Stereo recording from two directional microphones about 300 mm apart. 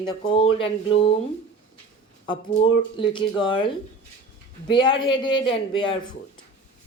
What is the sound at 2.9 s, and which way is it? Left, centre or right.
Speech, centre.